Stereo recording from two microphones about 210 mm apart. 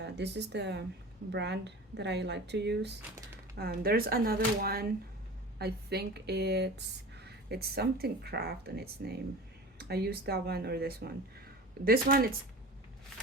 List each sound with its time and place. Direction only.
0.0 s speech: 55° right (ahead or behind)